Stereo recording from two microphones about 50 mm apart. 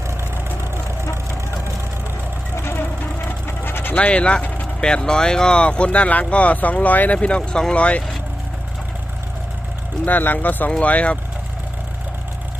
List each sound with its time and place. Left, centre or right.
2.6 s sewing machine: left
3.9 s speech: left
7.2 s speech: left
10.1 s speech: left
10.7 s speech: left